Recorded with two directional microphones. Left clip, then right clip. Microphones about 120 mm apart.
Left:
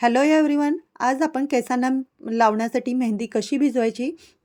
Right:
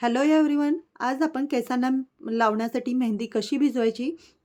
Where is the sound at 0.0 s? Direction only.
35° left (ahead or behind).